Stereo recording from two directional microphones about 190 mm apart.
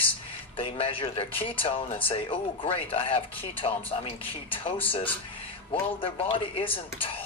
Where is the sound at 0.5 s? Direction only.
30° left (ahead or behind).